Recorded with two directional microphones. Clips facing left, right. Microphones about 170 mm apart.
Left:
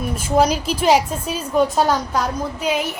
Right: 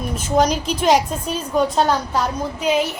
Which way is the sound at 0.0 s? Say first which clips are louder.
Left 1 dB; 10° left (ahead or behind).